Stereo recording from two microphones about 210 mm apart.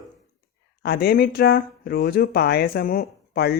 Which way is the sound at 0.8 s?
50° left (ahead or behind).